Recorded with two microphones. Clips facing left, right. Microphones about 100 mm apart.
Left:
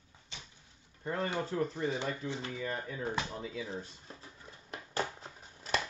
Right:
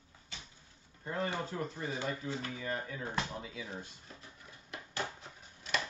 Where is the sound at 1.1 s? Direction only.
25° left (ahead or behind).